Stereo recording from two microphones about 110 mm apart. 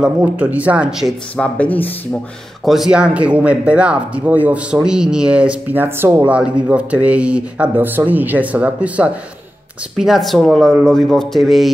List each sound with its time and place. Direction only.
0.0 s speech: 15° right (ahead or behind)
1.3 s speech: 10° left (ahead or behind)
2.6 s speech: centre (ahead or behind)